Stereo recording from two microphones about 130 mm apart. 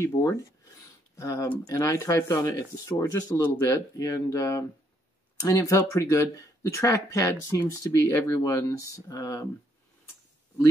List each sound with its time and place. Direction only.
0.0 s speech: 25° left (ahead or behind)